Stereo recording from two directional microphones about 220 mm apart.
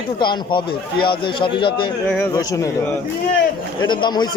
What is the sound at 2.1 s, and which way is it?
Speech, 10° left (ahead or behind).